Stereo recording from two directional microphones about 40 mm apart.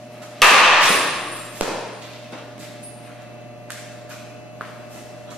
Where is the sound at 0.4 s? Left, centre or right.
Centre.